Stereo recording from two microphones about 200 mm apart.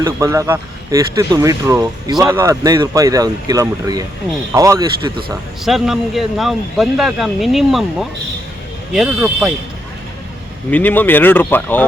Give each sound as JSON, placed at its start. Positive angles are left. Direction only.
{"t": 0.0, "sound": "speech", "side_deg": -15}
{"t": 5.6, "sound": "speech", "side_deg": 0}
{"t": 10.7, "sound": "speech", "side_deg": 10}